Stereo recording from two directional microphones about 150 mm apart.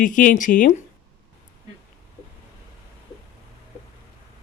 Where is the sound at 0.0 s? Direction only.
60° left (ahead or behind).